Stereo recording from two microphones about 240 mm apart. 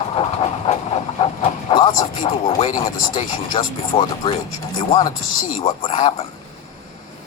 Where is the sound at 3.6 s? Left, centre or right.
Left.